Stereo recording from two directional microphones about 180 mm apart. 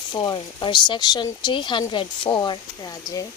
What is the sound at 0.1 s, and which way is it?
Speech, 25° left (ahead or behind).